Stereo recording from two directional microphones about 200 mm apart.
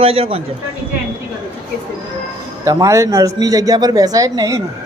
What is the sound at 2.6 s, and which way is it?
Speech, 15° right (ahead or behind).